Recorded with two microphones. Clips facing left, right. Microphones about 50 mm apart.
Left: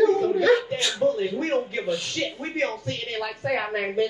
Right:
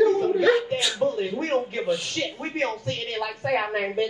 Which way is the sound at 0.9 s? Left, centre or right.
Right.